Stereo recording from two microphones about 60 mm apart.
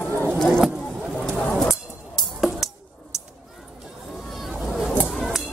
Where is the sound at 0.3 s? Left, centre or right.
Centre.